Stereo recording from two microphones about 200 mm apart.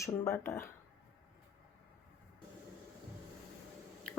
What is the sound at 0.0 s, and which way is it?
Speech, 10° left (ahead or behind).